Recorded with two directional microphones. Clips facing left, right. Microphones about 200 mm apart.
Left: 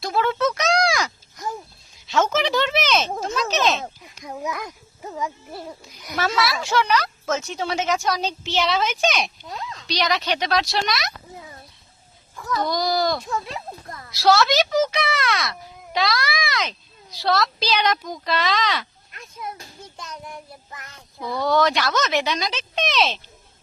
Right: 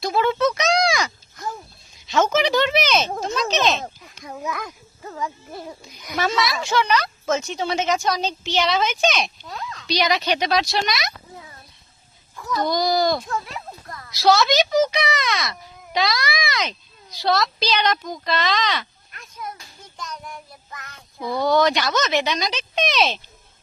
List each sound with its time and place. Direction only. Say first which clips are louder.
0.0 s a sound: right 2 dB; centre (ahead or behind)
2.0 s speech: right 2 dB; centre (ahead or behind)
4.2 s a sound: left 1 dB; 5° left (ahead or behind)
4.4 s a child's voice: right 1 dB; 15° left (ahead or behind)
9.8 s a child's voice: right 2 dB; 5° right (ahead or behind)
12.4 s a child's voice: right 2 dB; centre (ahead or behind)
13.4 s a sound: left 2 dB; 25° left (ahead or behind)
14.1 s a child's voice: even; 5° left (ahead or behind)
20.0 s child singing: right 2 dB; 25° left (ahead or behind)
21.2 s a child's voice: right 2 dB; centre (ahead or behind)